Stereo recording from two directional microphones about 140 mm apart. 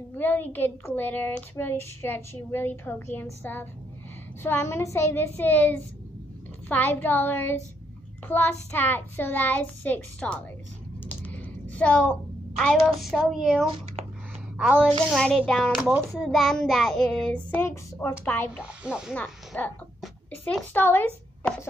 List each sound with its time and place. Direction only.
0.2 s child singing: 10° left (ahead or behind)
4.4 s child singing: 15° left (ahead or behind)
11.1 s a sound: 10° left (ahead or behind)
11.7 s a woman's voice: 10° left (ahead or behind)
14.0 s a sound: 45° right (ahead or behind)
14.6 s child singing: 5° right (ahead or behind)
18.6 s child singing: 5° right (ahead or behind)
19.5 s child singing: 10° left (ahead or behind)
20.2 s a child's voice: 10° left (ahead or behind)